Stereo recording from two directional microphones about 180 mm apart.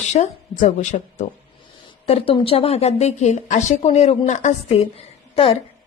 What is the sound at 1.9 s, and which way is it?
A woman's voice, 30° left (ahead or behind).